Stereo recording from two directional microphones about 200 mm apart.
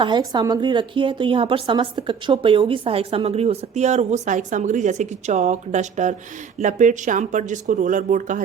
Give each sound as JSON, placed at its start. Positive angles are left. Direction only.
{"t": 0.0, "sound": "a woman's voice", "side_deg": -20}